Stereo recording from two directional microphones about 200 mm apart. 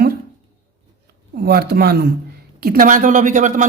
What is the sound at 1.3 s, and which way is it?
Speech, 50° right (ahead or behind).